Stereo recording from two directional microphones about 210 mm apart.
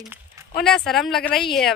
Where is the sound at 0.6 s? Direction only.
Centre (ahead or behind).